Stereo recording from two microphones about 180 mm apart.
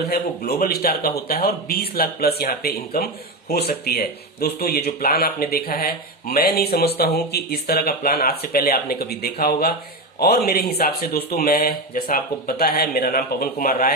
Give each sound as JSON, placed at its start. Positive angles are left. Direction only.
{"t": 0.1, "sound": "speech", "side_deg": 60}